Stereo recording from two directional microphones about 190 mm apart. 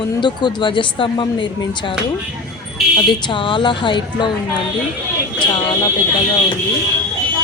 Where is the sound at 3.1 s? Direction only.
25° left (ahead or behind).